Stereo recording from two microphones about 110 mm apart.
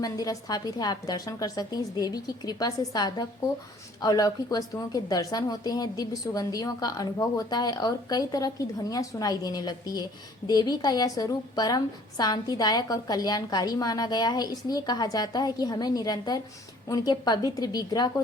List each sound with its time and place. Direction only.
0.0 s a woman's voice: 30° left (ahead or behind)